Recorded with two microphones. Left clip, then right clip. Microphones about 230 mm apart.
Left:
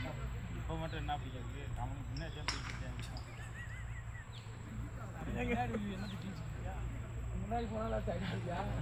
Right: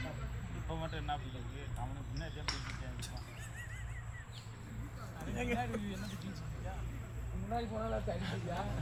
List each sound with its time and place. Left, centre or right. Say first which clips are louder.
0.7 s vehicle: right 1 dB; right
5.3 s a sound: even; right
7.5 s speech: even; right